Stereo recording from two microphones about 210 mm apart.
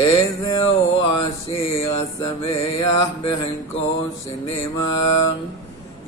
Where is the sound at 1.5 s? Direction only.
15° left (ahead or behind).